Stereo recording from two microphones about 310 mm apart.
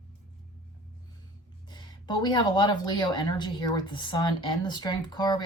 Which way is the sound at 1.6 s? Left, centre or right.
Centre.